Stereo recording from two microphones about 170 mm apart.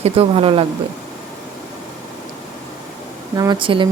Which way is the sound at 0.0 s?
35° right (ahead or behind).